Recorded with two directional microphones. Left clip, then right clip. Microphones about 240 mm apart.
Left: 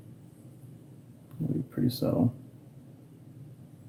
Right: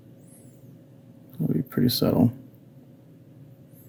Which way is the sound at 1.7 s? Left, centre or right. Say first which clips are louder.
Right 7 dB; right.